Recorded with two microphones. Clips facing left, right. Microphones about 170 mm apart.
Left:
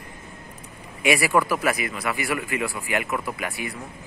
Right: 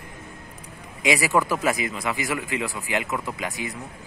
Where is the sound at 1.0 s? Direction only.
15° right (ahead or behind).